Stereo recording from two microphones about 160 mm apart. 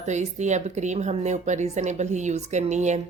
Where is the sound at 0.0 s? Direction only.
45° right (ahead or behind).